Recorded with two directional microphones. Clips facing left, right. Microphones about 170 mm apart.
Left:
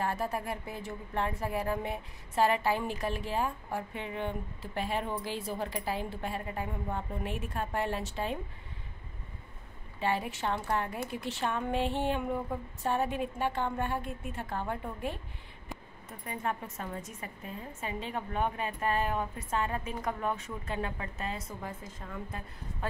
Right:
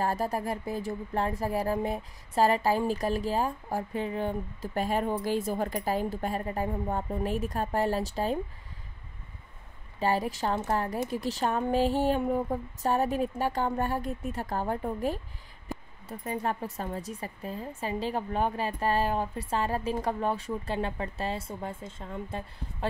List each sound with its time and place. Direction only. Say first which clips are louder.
0.0 s speech: right 4 dB; 40° right (ahead or behind)
9.9 s speech: right 4 dB; 40° right (ahead or behind)